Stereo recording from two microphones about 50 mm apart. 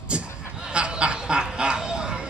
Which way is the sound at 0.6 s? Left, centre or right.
Right.